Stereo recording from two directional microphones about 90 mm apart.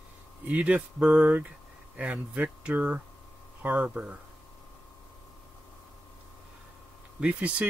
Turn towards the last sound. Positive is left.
turn(degrees=-15)  # may be behind; listen again after turning